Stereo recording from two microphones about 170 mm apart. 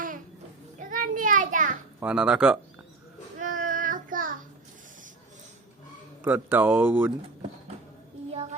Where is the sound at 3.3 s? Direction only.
50° right (ahead or behind).